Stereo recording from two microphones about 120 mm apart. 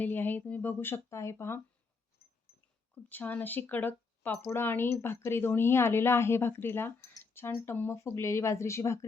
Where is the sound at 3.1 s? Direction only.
15° left (ahead or behind).